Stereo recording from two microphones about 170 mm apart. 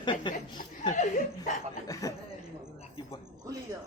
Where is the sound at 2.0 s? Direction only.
20° left (ahead or behind).